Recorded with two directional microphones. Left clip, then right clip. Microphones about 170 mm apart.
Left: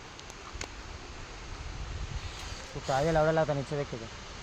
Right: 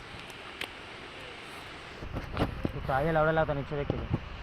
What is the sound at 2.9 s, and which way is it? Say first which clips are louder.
Speech: even; 35° left (ahead or behind).